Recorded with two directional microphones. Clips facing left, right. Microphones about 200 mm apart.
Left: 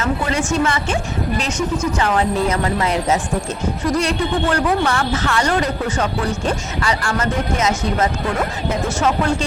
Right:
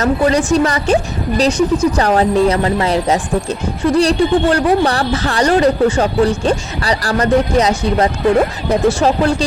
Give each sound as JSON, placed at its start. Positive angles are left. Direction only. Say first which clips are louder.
{"t": 0.0, "sound": "speech", "louder": "right 7 dB", "side_deg": -35}